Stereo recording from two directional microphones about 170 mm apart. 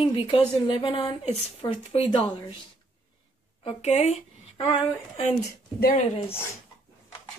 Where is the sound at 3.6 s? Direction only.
40° left (ahead or behind).